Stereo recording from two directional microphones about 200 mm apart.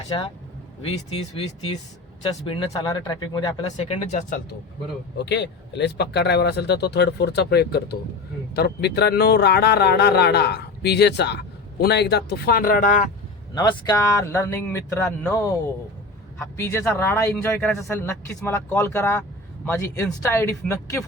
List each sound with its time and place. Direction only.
0.9 s speech: 30° left (ahead or behind)
5.1 s speech: 60° left (ahead or behind); by 13.1 s 40° left (ahead or behind)
13.5 s speech: 20° left (ahead or behind)